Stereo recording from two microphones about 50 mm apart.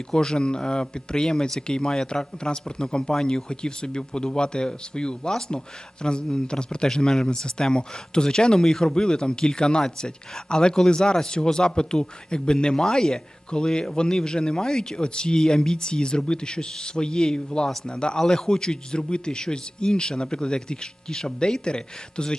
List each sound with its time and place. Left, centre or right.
0.1 s speech: centre